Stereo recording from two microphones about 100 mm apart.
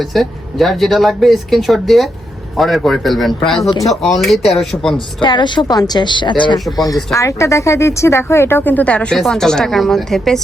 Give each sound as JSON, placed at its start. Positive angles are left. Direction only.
{"t": 0.0, "sound": "speech", "side_deg": 0}
{"t": 5.2, "sound": "a woman's voice", "side_deg": 50}
{"t": 6.7, "sound": "speech", "side_deg": 35}